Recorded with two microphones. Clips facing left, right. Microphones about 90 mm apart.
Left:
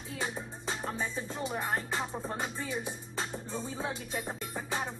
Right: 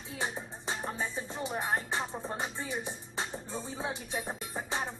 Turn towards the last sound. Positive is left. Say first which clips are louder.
# even
turn(degrees=-15)  # may be behind; listen again after turning